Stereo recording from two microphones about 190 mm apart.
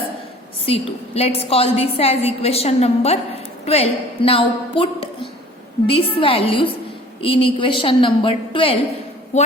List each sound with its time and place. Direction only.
0.6 s a woman's voice: 30° left (ahead or behind)